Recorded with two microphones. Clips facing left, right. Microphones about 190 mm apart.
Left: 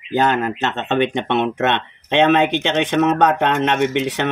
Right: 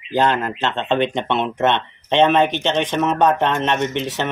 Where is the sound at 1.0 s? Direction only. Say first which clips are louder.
Left 2 dB; 55° left (ahead or behind).